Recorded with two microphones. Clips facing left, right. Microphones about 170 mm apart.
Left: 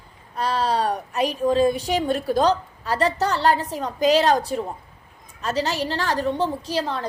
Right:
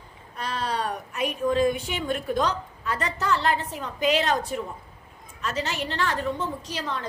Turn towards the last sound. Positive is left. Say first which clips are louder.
# left 6 dB
turn(degrees=35)  # may be behind; listen again after turning